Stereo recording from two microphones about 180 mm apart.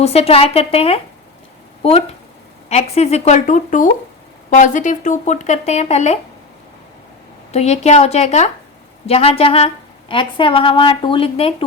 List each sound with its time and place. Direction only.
0.0 s a woman's voice: 35° left (ahead or behind)
7.5 s a woman's voice: 35° left (ahead or behind)